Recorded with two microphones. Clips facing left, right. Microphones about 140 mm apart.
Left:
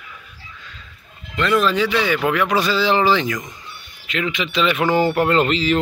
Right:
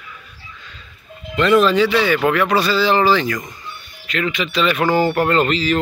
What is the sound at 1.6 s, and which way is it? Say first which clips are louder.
Speech: right 3 dB; 10° left (ahead or behind).